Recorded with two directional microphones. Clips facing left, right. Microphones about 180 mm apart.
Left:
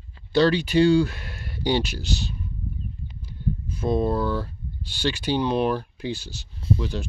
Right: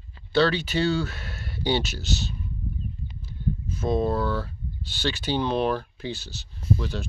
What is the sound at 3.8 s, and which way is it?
Speech, 10° left (ahead or behind).